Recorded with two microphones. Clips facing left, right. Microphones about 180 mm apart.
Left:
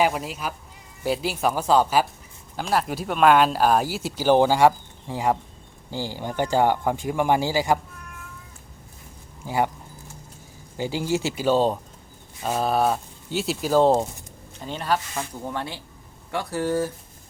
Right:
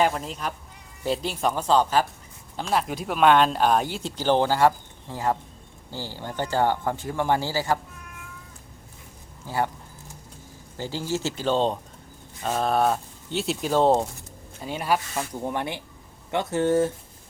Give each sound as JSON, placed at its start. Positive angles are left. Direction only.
{"t": 0.0, "sound": "speech", "side_deg": 5}
{"t": 9.5, "sound": "speech", "side_deg": 15}
{"t": 10.8, "sound": "speech", "side_deg": 15}
{"t": 14.6, "sound": "speech", "side_deg": -10}